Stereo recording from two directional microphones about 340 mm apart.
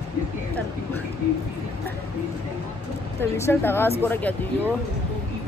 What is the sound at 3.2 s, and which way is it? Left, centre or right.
Speech, centre.